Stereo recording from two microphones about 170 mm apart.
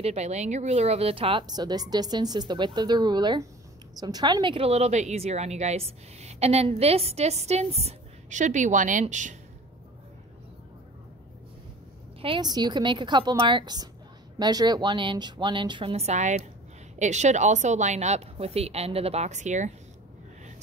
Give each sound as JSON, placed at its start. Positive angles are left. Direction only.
{"t": 0.0, "sound": "a woman's voice", "side_deg": -40}
{"t": 12.2, "sound": "a woman's voice", "side_deg": -25}